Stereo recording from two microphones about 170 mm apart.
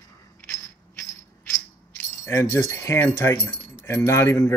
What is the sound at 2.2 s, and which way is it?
Speech, 15° left (ahead or behind).